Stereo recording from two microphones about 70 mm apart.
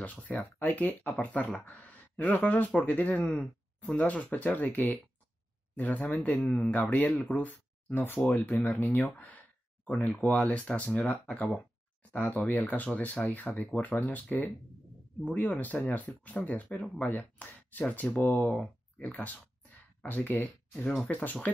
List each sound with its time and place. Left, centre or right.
0.0 s speech: left
3.3 s speech: centre
10.0 s speech: centre
12.1 s speech: left
20.7 s speech: centre
21.1 s speech: left